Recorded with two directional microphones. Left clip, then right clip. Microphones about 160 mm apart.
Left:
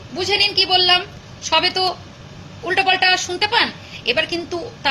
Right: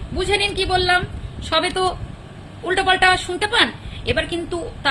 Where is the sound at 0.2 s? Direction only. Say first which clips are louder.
Left 3 dB; 15° right (ahead or behind).